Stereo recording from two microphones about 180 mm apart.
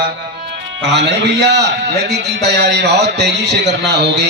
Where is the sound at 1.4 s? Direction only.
70° right (ahead or behind).